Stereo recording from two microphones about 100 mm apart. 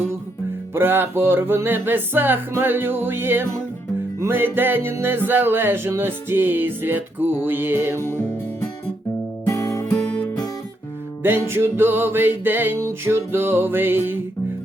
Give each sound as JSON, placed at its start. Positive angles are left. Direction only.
{"t": 0.7, "sound": "music", "side_deg": -20}
{"t": 9.5, "sound": "music", "side_deg": 30}
{"t": 10.1, "sound": "music", "side_deg": 40}
{"t": 11.2, "sound": "music", "side_deg": -20}